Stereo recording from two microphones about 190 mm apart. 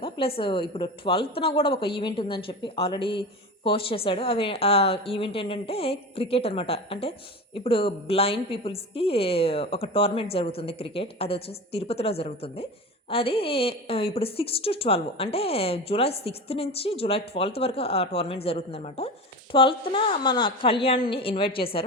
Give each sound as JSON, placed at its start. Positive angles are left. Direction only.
{"t": 0.0, "sound": "a woman's voice", "side_deg": 30}